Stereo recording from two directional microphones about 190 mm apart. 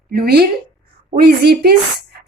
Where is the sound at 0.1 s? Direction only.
55° right (ahead or behind).